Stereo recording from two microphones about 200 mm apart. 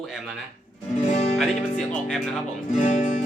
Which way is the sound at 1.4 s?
5° left (ahead or behind).